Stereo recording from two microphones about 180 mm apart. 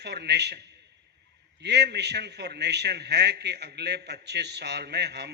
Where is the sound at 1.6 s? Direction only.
70° right (ahead or behind).